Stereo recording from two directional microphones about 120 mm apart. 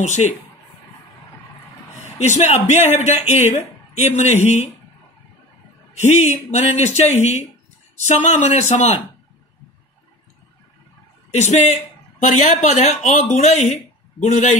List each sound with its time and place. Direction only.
0.0 s a man's voice: 80° left
2.1 s speech: 70° left (ahead or behind)
5.9 s speech: 75° left (ahead or behind)
11.3 s speech: 70° left (ahead or behind)
14.2 s a man's voice: 85° left